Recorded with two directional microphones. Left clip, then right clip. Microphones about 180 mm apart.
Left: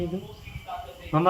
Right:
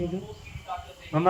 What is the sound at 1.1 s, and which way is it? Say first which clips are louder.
Speech: left 2 dB; 10° left (ahead or behind).